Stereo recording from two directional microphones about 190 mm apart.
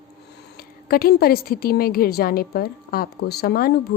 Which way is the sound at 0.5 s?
50° left (ahead or behind).